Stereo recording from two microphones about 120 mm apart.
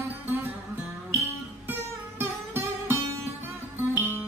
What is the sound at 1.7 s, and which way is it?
Music, 20° right (ahead or behind).